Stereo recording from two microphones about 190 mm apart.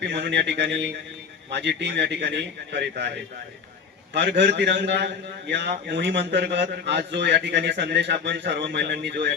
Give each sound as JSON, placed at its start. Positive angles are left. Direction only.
{"t": 0.0, "sound": "a man's voice", "side_deg": -65}
{"t": 4.1, "sound": "a man's voice", "side_deg": -65}